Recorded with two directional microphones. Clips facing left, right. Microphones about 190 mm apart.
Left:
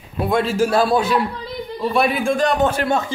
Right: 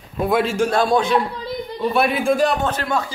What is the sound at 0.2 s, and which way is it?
A man's voice, centre (ahead or behind).